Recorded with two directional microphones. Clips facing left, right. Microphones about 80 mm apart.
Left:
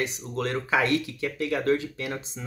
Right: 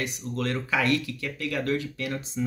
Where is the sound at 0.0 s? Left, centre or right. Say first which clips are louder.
Left 1 dB; left.